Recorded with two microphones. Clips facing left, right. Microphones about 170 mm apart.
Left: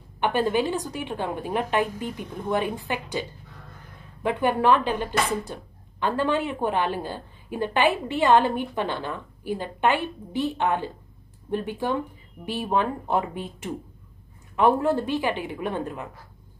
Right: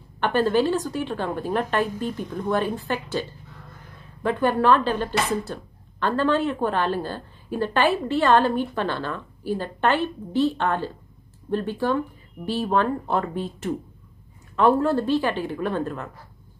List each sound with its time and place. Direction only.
0.2 s speech: 15° left (ahead or behind)